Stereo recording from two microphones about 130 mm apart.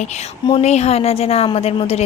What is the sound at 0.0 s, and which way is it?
A woman's voice, 60° left (ahead or behind).